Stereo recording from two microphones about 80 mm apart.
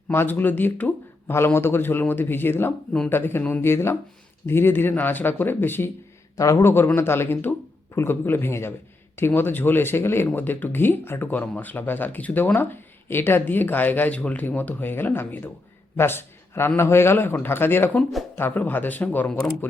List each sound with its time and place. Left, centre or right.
0.1 s speech: left
6.3 s speech: left; by 19.3 s centre